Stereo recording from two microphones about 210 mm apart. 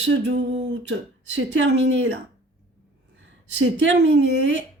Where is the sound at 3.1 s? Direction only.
60° right (ahead or behind).